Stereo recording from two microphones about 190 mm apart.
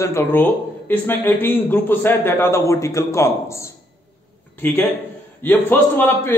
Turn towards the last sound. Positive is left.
turn(degrees=10)  # may be behind; listen again after turning